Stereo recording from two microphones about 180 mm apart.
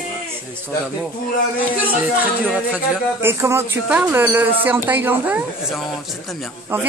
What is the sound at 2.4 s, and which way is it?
A woman's voice, 5° right (ahead or behind).